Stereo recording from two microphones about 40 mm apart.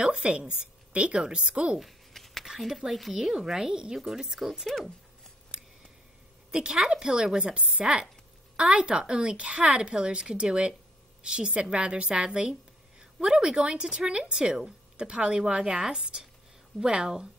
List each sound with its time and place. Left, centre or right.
0.0 s a woman's voice: right
1.8 s a sound: centre
2.4 s speech: centre
4.6 s speech: centre
6.5 s a woman's voice: centre